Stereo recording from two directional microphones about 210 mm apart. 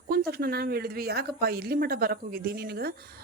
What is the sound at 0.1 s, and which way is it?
Speech, 45° right (ahead or behind).